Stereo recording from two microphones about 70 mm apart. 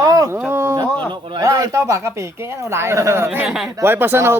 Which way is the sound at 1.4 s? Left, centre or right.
Right.